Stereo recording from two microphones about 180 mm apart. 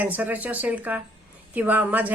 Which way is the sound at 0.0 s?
10° right (ahead or behind).